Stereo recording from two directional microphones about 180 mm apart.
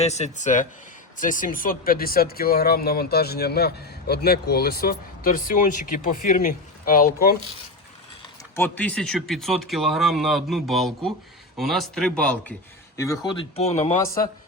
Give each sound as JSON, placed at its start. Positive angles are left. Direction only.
{"t": 0.0, "sound": "speech", "side_deg": 40}
{"t": 8.5, "sound": "speech", "side_deg": 10}
{"t": 13.0, "sound": "speech", "side_deg": 20}